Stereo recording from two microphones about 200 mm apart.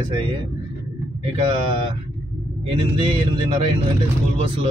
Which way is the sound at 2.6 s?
30° right (ahead or behind).